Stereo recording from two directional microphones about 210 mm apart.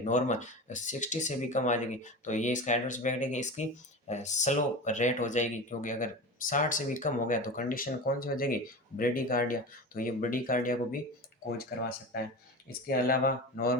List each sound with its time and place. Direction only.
0.0 s speech: 35° left (ahead or behind)
12.6 s speech: 45° left (ahead or behind)